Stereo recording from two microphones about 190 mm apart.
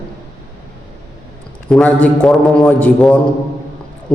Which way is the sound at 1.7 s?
5° left (ahead or behind).